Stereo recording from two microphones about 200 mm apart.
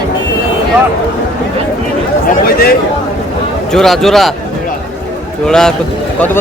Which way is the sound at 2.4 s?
50° left (ahead or behind).